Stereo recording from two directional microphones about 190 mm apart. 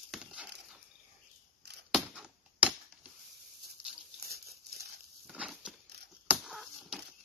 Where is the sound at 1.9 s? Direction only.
5° right (ahead or behind).